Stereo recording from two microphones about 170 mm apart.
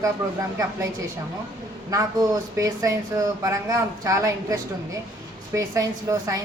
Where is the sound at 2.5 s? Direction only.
20° right (ahead or behind).